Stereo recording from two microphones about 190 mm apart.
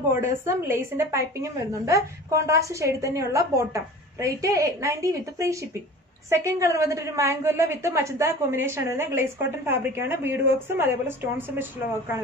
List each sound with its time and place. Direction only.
0.1 s a woman's voice: 10° right (ahead or behind)